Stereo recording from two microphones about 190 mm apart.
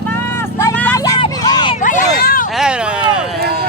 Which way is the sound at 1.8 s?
45° left (ahead or behind).